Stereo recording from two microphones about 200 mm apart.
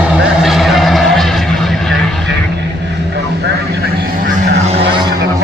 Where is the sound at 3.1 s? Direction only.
55° right (ahead or behind).